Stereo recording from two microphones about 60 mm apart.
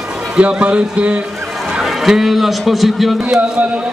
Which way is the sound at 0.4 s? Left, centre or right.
Right.